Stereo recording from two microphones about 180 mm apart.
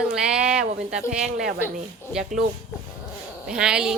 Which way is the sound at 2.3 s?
45° right (ahead or behind).